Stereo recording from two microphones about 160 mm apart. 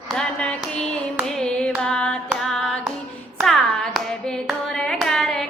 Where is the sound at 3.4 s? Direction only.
Centre (ahead or behind).